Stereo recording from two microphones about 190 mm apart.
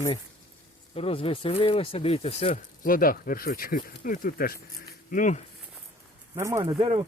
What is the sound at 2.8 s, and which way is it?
Speech, 50° left (ahead or behind).